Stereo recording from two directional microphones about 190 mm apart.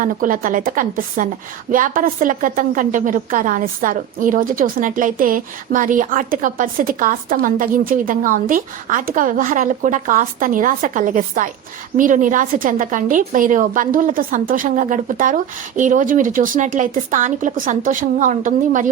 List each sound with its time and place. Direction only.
0.0 s a woman's voice: 45° right (ahead or behind)